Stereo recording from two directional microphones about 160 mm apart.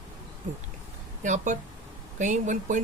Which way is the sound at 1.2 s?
50° right (ahead or behind).